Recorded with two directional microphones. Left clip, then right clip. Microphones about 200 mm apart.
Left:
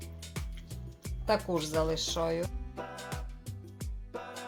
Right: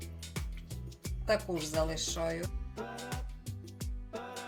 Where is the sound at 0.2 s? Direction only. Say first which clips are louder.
Even; centre (ahead or behind).